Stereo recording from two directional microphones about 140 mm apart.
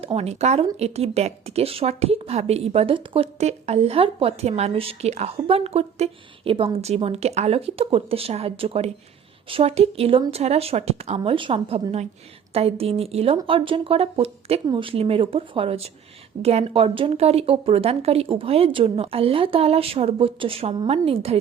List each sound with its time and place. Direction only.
0.0 s speech: 45° right (ahead or behind)
3.3 s speech: 50° right (ahead or behind)
11.2 s speech: 35° right (ahead or behind)